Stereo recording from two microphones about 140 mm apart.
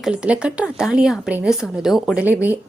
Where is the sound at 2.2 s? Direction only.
10° right (ahead or behind).